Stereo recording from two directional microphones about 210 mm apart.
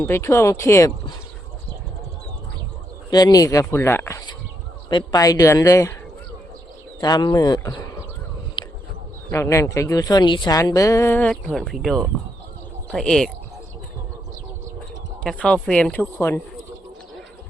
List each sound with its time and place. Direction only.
0.0 s a woman's voice: 10° left (ahead or behind)
3.1 s a woman's voice: 20° left (ahead or behind)
7.0 s speech: 20° left (ahead or behind)
8.6 s a sound: 20° left (ahead or behind)
9.3 s a woman's voice: 15° left (ahead or behind)
15.2 s speech: 5° left (ahead or behind)